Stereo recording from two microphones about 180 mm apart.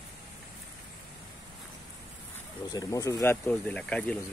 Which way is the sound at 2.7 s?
20° left (ahead or behind).